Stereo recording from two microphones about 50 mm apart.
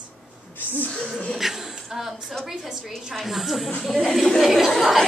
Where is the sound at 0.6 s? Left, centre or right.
Left.